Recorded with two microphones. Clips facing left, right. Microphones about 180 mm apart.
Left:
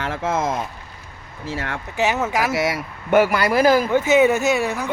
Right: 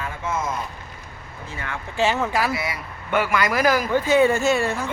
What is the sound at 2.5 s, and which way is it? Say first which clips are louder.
Speech: left 6 dB; 90° left.